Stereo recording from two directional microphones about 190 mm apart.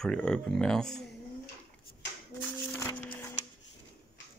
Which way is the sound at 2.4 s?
10° left (ahead or behind).